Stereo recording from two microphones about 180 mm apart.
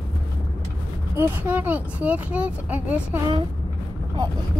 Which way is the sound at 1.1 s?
10° right (ahead or behind).